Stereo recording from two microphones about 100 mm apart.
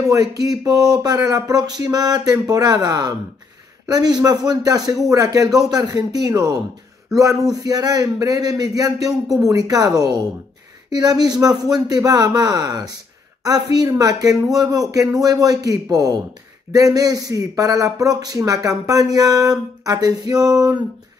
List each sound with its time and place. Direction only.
0.0 s speech: 35° right (ahead or behind)